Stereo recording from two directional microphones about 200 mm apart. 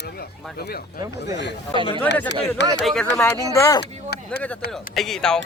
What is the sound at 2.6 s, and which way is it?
Speech, 60° left (ahead or behind).